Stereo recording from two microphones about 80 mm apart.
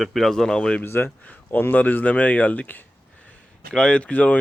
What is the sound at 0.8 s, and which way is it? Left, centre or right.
Speech, left.